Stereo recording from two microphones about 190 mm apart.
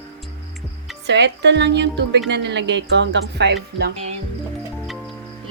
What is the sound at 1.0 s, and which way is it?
Speech, 65° right (ahead or behind).